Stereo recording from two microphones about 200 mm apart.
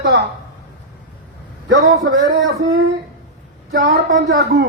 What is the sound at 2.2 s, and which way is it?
Speech, 65° right (ahead or behind).